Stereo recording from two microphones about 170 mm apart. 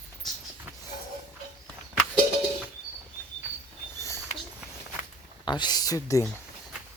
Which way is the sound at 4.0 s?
15° left (ahead or behind).